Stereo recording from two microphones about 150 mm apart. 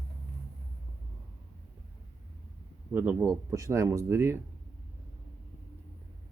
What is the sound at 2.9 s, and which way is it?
Speech, 10° right (ahead or behind).